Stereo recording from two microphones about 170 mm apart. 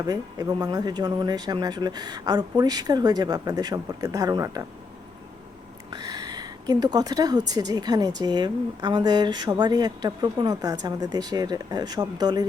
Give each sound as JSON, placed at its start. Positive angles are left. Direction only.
{"t": 0.1, "sound": "speech", "side_deg": -20}
{"t": 6.0, "sound": "a woman's voice", "side_deg": -25}